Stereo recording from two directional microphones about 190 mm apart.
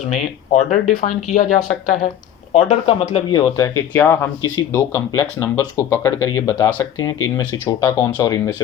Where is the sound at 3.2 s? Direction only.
20° left (ahead or behind).